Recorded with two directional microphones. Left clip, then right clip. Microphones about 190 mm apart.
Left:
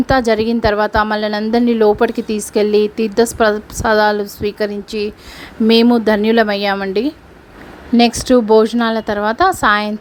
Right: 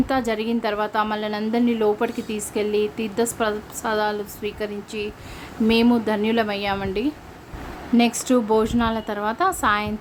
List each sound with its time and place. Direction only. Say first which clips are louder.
0.1 s a woman's voice: left 9 dB; 30° left (ahead or behind)